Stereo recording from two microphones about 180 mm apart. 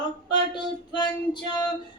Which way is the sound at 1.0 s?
25° left (ahead or behind).